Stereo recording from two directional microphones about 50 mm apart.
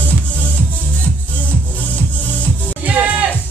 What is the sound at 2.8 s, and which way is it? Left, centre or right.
Music, right.